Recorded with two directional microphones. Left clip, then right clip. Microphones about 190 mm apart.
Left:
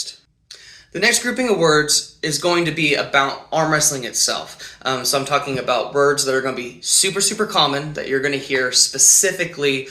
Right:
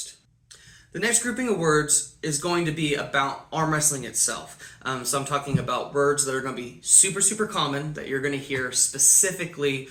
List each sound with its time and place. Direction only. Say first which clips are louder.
0.9 s speech: left 8 dB; 20° right (ahead or behind)